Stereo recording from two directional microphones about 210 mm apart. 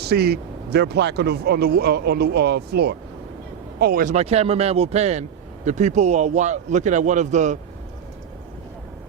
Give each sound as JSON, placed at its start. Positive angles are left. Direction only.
{"t": 0.0, "sound": "a man's voice", "side_deg": -50}